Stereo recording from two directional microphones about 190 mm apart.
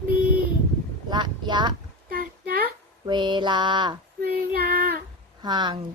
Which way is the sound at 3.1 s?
25° right (ahead or behind).